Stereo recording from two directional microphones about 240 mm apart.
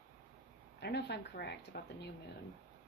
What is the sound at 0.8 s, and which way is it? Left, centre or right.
Speech, left.